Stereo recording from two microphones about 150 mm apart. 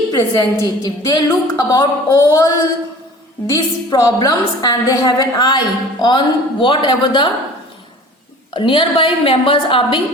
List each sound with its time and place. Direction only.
0.1 s a woman's voice: 25° left (ahead or behind)
3.5 s a woman's voice: 25° left (ahead or behind)
8.5 s a woman's voice: 35° left (ahead or behind)